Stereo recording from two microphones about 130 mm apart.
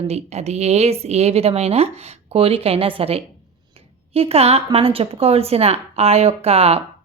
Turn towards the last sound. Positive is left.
turn(degrees=-50)  # may be behind; listen again after turning